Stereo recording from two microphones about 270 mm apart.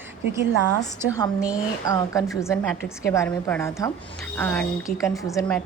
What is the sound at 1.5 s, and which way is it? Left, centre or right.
A woman's voice, centre.